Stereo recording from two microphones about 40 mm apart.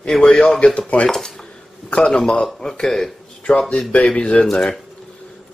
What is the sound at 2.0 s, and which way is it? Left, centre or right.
Speech, left.